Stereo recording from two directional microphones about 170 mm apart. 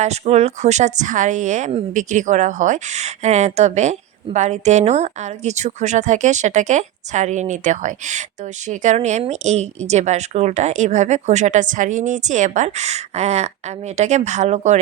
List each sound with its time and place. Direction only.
0.0 s a woman's voice: 40° right (ahead or behind)